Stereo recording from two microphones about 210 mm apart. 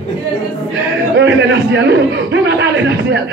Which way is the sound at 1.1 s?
55° right (ahead or behind).